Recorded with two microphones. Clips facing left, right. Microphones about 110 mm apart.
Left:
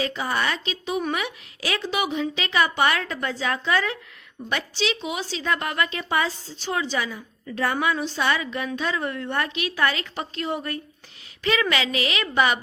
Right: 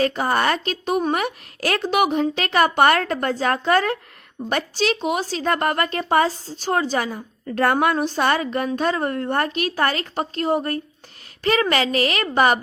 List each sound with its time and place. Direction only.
0.0 s a woman's voice: 50° right (ahead or behind)